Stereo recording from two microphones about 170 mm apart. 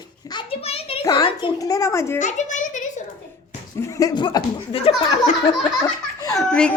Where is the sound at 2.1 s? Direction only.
45° left (ahead or behind).